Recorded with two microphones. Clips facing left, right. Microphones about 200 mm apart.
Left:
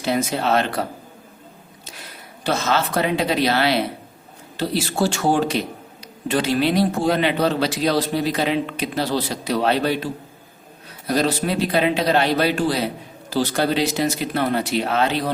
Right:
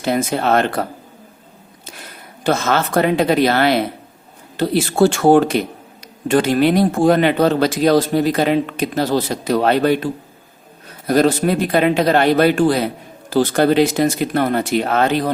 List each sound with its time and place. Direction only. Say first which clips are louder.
0.0 s speech: right 3 dB; 50° right (ahead or behind)
2.4 s speech: right 4 dB; 50° right (ahead or behind)